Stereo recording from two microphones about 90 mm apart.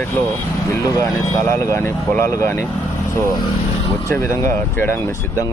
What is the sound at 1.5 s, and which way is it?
Speech, 35° left (ahead or behind).